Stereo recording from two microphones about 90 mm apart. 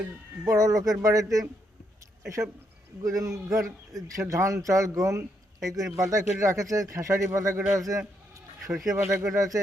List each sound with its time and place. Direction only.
0.4 s a man's voice: 40° right (ahead or behind)
3.0 s a man's voice: 40° right (ahead or behind)
8.7 s speech: 5° right (ahead or behind)
9.0 s a man's voice: 35° right (ahead or behind)